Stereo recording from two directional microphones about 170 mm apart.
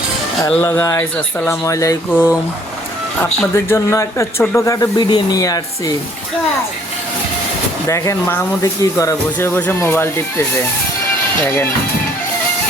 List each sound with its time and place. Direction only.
0.4 s speech: 10° left (ahead or behind)
7.9 s speech: 20° left (ahead or behind)